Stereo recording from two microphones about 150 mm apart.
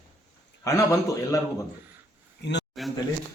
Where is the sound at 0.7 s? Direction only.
25° left (ahead or behind).